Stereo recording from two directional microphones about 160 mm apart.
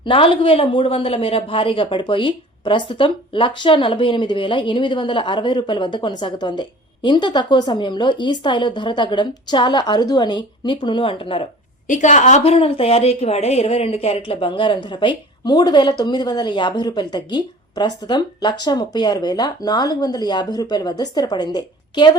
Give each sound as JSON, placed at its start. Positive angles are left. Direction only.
{"t": 0.0, "sound": "a woman's voice", "side_deg": 35}
{"t": 11.9, "sound": "a woman's voice", "side_deg": 50}